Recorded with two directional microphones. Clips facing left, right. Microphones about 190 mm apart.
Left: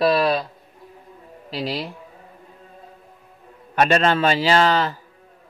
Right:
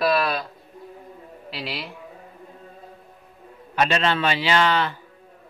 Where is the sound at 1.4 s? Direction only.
40° left (ahead or behind).